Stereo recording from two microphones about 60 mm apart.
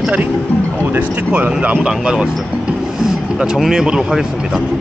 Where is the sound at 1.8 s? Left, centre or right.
Centre.